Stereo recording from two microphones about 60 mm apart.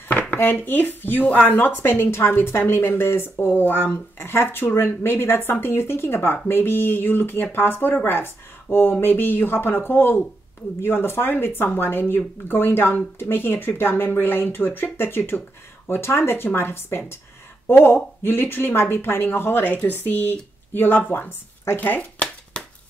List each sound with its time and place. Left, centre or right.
0.1 s dishes: left
0.4 s speech: left
21.7 s a sound: left